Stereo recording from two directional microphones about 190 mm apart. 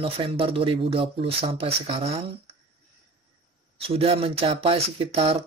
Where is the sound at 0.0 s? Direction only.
30° right (ahead or behind).